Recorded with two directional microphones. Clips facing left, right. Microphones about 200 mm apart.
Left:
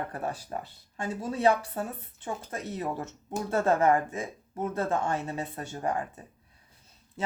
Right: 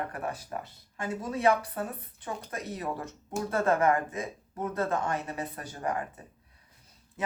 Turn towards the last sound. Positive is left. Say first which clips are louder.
# left 2 dB
turn(degrees=25)  # may be behind; listen again after turning